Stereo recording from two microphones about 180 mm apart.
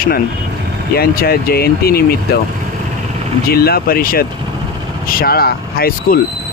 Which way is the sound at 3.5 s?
60° left (ahead or behind).